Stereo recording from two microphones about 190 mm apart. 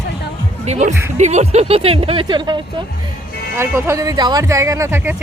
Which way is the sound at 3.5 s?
15° right (ahead or behind).